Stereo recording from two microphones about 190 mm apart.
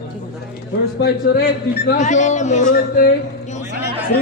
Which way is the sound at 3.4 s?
40° left (ahead or behind).